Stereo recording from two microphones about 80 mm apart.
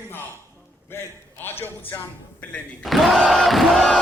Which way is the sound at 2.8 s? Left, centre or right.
Centre.